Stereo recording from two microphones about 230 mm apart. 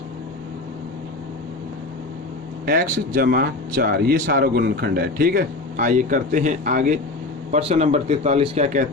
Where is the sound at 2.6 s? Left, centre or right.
Right.